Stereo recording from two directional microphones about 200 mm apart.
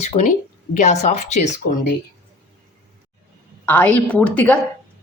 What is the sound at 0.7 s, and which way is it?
A woman's voice, 35° left (ahead or behind).